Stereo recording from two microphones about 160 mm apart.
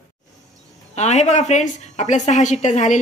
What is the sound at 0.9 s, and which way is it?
A woman's voice, 45° left (ahead or behind).